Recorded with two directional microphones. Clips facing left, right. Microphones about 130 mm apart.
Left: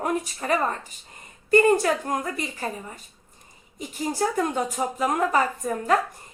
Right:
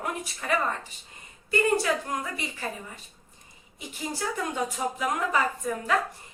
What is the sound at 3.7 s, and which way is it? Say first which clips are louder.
A woman's voice: left 7 dB; 40° left (ahead or behind).